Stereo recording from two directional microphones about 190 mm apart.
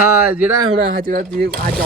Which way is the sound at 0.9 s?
50° right (ahead or behind).